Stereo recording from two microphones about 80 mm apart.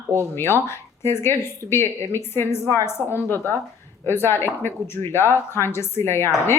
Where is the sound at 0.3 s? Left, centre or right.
Left.